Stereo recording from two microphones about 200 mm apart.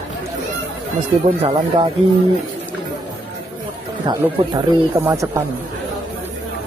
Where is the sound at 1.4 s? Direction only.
25° right (ahead or behind).